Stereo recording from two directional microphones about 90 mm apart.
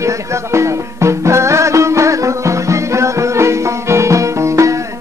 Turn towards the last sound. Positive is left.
turn(degrees=-35)  # may be behind; listen again after turning